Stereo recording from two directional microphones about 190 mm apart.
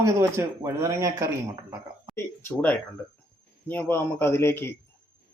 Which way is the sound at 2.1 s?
15° left (ahead or behind).